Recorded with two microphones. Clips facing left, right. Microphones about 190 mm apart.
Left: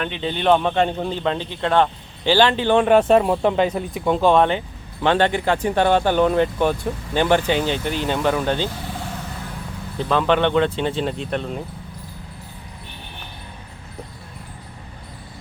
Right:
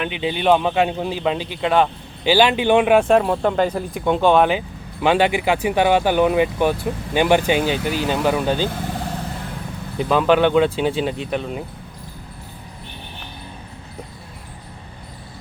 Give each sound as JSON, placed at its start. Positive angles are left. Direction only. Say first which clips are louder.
{"t": 0.0, "sound": "a man's voice", "louder": "right 1 dB", "side_deg": -10}
{"t": 10.0, "sound": "a man's voice", "louder": "right 3 dB", "side_deg": -10}